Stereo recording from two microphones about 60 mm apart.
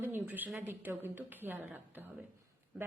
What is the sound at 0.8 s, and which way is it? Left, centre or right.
A woman's voice, right.